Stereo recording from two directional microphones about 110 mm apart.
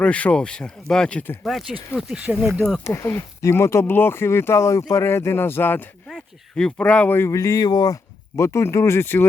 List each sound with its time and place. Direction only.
0.0 s speech: 10° left (ahead or behind); by 2.6 s 5° right (ahead or behind)
2.8 s speech: 25° left (ahead or behind)
6.1 s speech: 5° left (ahead or behind)
7.3 s speech: 30° left (ahead or behind)
8.4 s speech: 25° left (ahead or behind)